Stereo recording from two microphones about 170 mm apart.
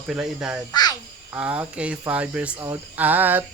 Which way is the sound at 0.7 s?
25° left (ahead or behind).